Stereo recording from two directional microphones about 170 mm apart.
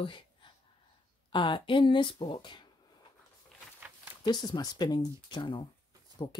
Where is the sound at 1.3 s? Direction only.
30° left (ahead or behind).